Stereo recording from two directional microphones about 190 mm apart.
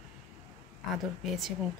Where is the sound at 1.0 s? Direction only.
Centre (ahead or behind).